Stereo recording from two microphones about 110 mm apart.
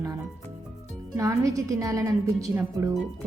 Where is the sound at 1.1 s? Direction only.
30° right (ahead or behind).